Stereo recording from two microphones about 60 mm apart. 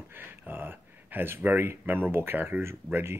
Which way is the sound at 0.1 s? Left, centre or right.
Right.